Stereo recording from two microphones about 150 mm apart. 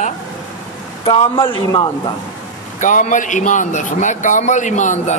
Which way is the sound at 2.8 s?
55° left (ahead or behind).